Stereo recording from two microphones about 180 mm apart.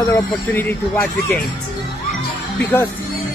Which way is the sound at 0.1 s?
10° left (ahead or behind).